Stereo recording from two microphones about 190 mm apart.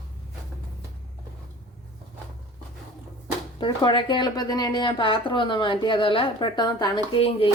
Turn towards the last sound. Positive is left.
turn(degrees=30)  # may be behind; listen again after turning